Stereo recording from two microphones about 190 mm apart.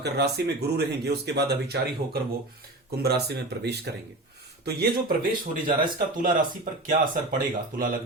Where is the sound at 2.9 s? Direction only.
60° right (ahead or behind).